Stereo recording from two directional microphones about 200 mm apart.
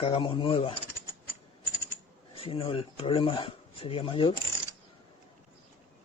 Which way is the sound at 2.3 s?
25° left (ahead or behind).